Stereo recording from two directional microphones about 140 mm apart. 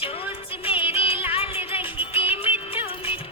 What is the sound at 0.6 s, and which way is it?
Music, 40° left (ahead or behind).